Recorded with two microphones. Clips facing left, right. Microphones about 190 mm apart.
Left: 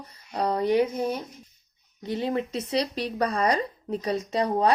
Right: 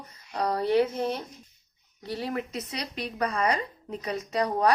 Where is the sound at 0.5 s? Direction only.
15° left (ahead or behind).